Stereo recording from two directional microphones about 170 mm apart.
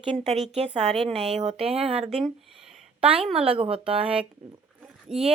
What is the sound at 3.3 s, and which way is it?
Speech, 35° right (ahead or behind).